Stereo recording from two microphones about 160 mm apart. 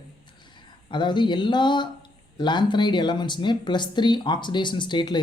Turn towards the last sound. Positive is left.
turn(degrees=30)  # may be behind; listen again after turning